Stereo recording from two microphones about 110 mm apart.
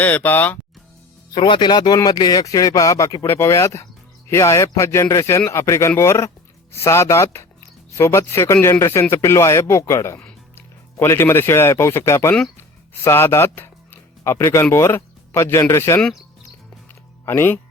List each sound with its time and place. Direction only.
0.0 s speech: 15° left (ahead or behind)
1.3 s speech: 50° left (ahead or behind); by 16.0 s 25° left (ahead or behind)
16.9 s music: 20° left (ahead or behind)